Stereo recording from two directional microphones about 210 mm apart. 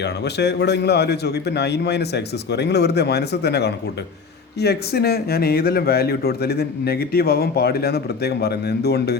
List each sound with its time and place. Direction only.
0.0 s speech: 55° left (ahead or behind)